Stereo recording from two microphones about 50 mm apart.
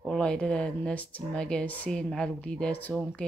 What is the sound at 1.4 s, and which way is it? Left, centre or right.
Speech, centre.